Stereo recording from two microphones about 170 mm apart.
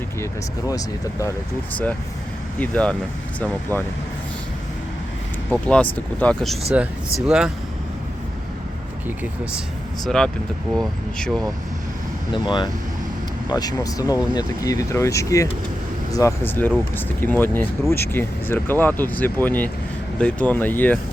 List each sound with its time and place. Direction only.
2.6 s speech: 5° left (ahead or behind)
5.5 s speech: 5° left (ahead or behind)
10.0 s speech: 5° left (ahead or behind)
12.3 s speech: 25° left (ahead or behind); by 21.0 s 10° left (ahead or behind)